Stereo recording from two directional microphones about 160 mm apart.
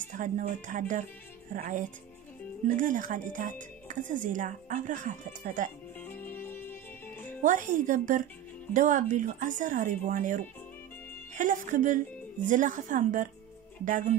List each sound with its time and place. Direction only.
0.1 s speech: 55° right (ahead or behind)
5.9 s music: 10° left (ahead or behind)
7.4 s speech: 55° right (ahead or behind)